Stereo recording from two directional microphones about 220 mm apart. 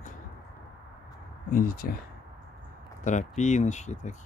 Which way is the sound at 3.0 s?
35° left (ahead or behind).